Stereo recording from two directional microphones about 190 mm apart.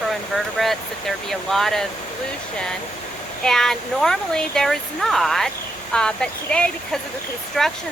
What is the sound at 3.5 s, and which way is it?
Speech, centre (ahead or behind).